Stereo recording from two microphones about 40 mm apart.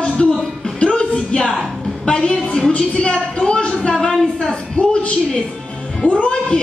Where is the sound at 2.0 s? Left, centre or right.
Left.